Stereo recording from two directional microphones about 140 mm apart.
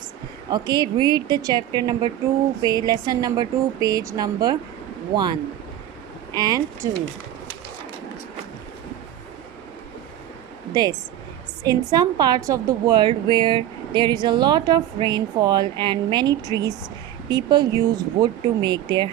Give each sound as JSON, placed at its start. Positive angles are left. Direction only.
{"t": 0.5, "sound": "a woman's voice", "side_deg": -30}
{"t": 10.8, "sound": "a woman's voice", "side_deg": -30}